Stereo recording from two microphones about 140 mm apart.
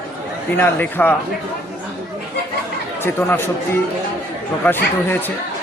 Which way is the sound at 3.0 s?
15° left (ahead or behind).